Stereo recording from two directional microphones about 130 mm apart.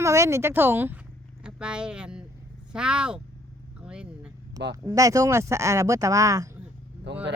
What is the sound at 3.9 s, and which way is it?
Vehicle, 10° right (ahead or behind).